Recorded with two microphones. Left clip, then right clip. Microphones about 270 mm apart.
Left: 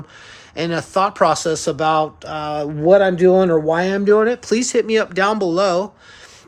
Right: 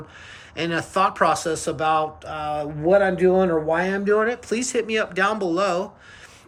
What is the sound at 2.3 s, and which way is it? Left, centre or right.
Speech, left.